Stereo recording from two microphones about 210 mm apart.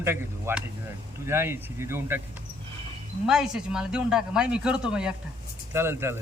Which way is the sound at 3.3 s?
5° right (ahead or behind).